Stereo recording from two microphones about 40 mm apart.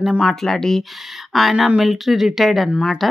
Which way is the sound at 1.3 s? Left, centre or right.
Centre.